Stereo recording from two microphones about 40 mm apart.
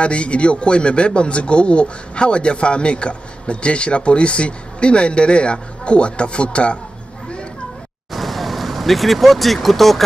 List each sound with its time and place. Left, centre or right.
0.0 s a man's voice: left
8.1 s vehicle: centre